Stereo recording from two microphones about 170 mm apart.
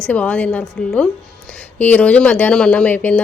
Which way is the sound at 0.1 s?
10° left (ahead or behind).